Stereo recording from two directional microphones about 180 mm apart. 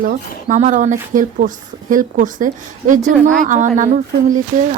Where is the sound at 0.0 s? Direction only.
45° right (ahead or behind).